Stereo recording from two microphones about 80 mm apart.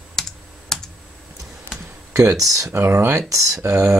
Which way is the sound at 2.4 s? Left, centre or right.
Right.